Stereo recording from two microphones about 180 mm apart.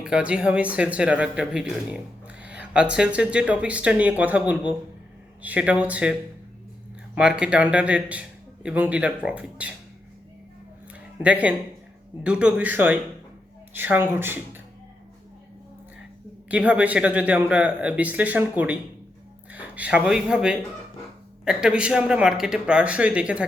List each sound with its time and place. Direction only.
0.0 s speech: 5° right (ahead or behind)
7.2 s speech: 5° right (ahead or behind)
11.2 s speech: 5° right (ahead or behind)
16.5 s speech: 5° right (ahead or behind)